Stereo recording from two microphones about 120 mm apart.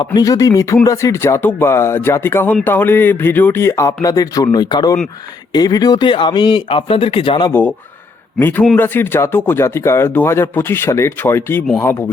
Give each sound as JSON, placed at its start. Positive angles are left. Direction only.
{"t": 0.0, "sound": "speech", "side_deg": 35}
{"t": 8.4, "sound": "a man's voice", "side_deg": 15}